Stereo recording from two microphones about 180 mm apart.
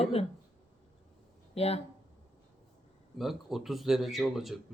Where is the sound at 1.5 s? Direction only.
35° left (ahead or behind).